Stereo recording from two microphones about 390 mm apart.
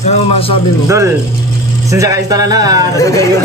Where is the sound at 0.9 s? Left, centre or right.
Centre.